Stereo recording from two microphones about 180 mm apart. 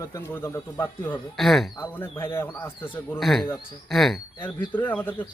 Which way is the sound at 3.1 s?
Centre (ahead or behind).